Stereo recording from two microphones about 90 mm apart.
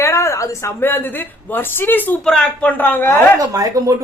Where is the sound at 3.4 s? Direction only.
40° right (ahead or behind).